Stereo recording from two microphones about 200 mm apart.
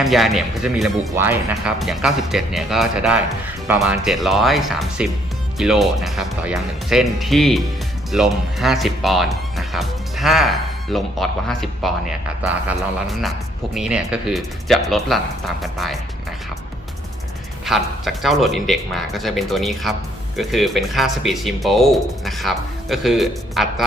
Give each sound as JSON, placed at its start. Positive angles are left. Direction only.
{"t": 0.0, "sound": "speech", "side_deg": 0}
{"t": 1.1, "sound": "speech", "side_deg": -10}
{"t": 1.5, "sound": "speech", "side_deg": 0}
{"t": 17.7, "sound": "speech", "side_deg": 0}